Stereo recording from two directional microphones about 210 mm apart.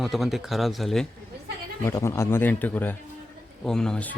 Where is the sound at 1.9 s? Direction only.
15° left (ahead or behind).